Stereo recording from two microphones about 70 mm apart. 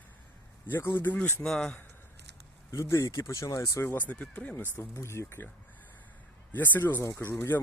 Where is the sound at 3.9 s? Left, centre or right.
Left.